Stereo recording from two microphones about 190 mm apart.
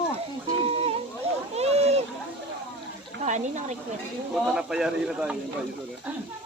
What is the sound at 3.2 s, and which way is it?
Speech, 40° right (ahead or behind).